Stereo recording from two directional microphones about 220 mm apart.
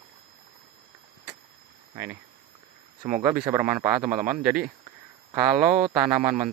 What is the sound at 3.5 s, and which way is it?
Speech, 10° right (ahead or behind).